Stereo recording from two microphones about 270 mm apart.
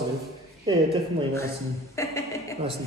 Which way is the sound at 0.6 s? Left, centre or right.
Centre.